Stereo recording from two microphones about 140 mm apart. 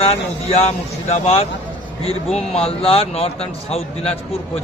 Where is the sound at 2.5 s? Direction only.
45° left (ahead or behind).